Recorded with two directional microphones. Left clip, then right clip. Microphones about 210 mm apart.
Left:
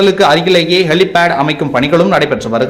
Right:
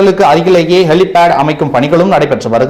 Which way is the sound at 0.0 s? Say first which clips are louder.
Right 2 dB; 5° right (ahead or behind).